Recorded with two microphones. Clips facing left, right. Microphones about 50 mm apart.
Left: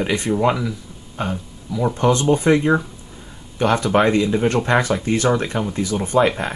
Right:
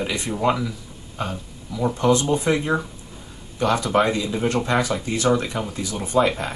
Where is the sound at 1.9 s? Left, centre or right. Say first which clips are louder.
Left 2 dB; left.